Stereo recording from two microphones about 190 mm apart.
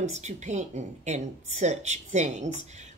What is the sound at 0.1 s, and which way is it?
A woman's voice, 35° right (ahead or behind).